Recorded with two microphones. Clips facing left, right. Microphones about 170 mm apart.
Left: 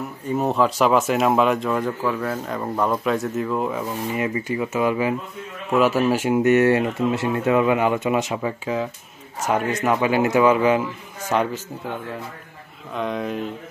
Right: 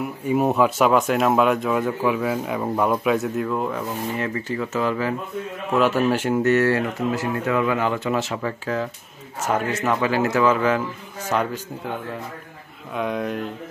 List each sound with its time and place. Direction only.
0.3 s speech: 5° right (ahead or behind); by 11.4 s 10° left (ahead or behind)
12.9 s speech: centre (ahead or behind)